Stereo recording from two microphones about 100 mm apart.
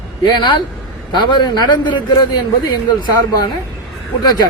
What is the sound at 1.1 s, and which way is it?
Speech, 50° left (ahead or behind).